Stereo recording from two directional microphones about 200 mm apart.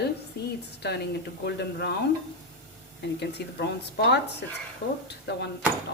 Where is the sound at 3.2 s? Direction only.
55° left (ahead or behind).